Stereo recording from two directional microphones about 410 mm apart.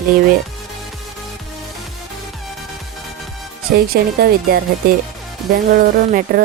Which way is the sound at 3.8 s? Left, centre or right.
Right.